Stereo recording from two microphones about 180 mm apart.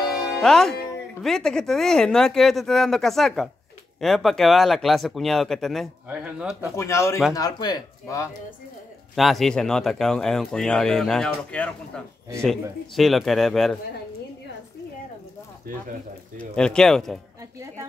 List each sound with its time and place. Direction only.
0.4 s speech: 5° left (ahead or behind)
6.8 s speech: 15° left (ahead or behind)
9.1 s speech: centre (ahead or behind)
16.3 s speech: 5° left (ahead or behind)